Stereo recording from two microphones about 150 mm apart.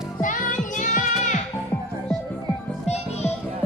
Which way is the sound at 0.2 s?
60° left (ahead or behind).